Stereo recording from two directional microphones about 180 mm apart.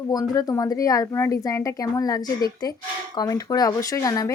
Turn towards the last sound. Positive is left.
turn(degrees=20)  # may be behind; listen again after turning